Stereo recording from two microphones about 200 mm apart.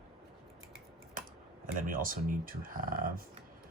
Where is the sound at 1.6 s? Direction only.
45° right (ahead or behind).